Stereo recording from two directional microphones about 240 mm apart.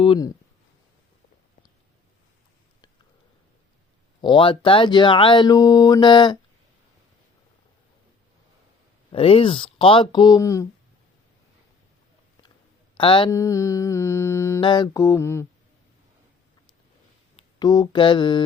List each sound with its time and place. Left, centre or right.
0.0 s mantra: centre
4.2 s speech: centre
9.1 s speech: left
13.0 s mantra: left
17.3 s mantra: centre